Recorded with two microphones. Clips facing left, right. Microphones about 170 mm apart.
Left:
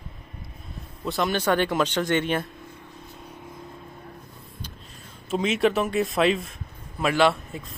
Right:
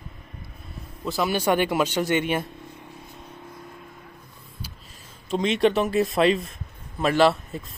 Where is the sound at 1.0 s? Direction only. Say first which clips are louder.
Right 1 dB; centre (ahead or behind).